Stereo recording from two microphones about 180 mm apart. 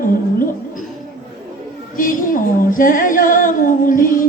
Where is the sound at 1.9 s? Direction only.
50° left (ahead or behind).